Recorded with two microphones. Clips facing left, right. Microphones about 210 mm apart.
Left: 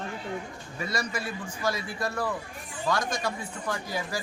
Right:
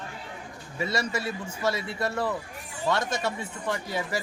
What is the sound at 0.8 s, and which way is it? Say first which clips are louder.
Speech: right 3 dB; 25° right (ahead or behind).